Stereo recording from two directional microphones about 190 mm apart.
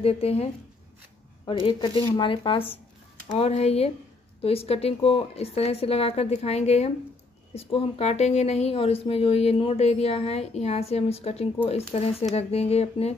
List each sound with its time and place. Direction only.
0.0 s a woman's voice: 30° left (ahead or behind)
1.7 s a woman's voice: 25° left (ahead or behind)